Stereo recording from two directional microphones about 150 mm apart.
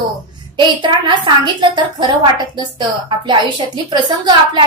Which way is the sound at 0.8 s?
30° right (ahead or behind).